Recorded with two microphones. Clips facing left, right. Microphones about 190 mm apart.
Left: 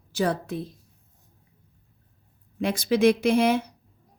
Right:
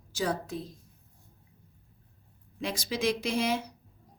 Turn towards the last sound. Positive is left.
turn(degrees=60)  # may be behind; listen again after turning